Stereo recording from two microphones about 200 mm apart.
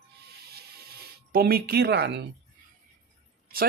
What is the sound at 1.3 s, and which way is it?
Speech, 50° right (ahead or behind).